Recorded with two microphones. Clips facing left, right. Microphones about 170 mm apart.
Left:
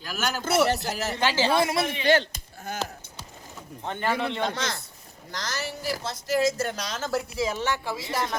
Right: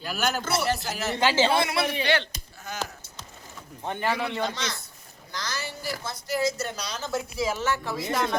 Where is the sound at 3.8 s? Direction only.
15° right (ahead or behind).